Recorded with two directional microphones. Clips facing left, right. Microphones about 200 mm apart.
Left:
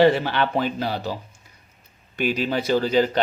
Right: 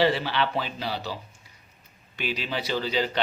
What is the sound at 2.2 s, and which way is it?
A man's voice, 45° left (ahead or behind).